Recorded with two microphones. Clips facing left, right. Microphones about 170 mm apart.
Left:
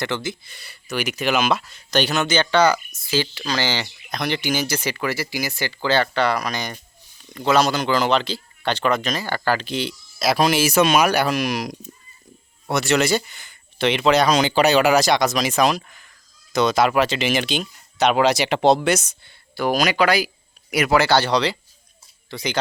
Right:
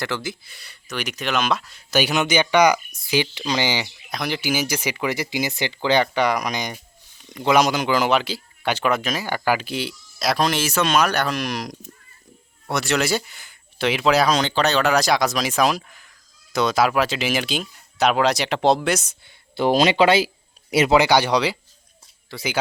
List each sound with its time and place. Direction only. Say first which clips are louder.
0.0 s speech: left 2 dB; centre (ahead or behind)
19.5 s speech: right 3 dB; 25° right (ahead or behind); by 22.6 s 5° right (ahead or behind)